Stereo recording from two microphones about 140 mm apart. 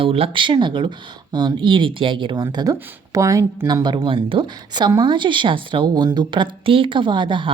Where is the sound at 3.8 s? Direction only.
35° right (ahead or behind).